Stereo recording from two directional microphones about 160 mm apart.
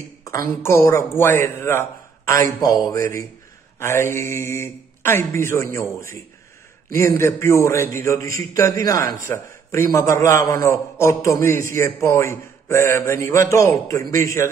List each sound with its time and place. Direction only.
0.2 s a man's voice: 20° left (ahead or behind)